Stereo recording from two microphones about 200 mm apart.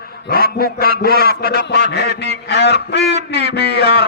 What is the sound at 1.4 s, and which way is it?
Music, 55° left (ahead or behind).